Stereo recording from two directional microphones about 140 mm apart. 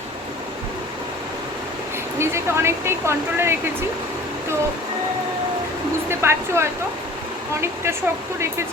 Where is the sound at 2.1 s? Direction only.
20° right (ahead or behind).